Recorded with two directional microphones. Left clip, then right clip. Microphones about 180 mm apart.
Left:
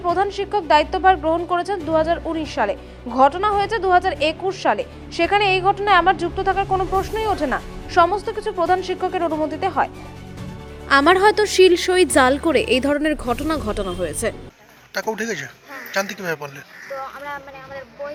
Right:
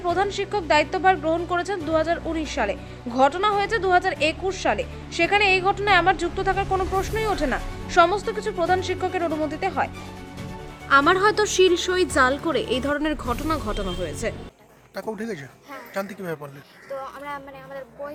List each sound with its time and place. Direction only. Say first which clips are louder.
0.0 s speech: left 3 dB; 5° left (ahead or behind)
10.8 s a woman's voice: left 3 dB; 30° left (ahead or behind)
15.1 s speech: left 7 dB; 5° right (ahead or behind)